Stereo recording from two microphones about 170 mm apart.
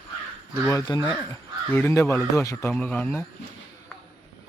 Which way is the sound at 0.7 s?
20° left (ahead or behind).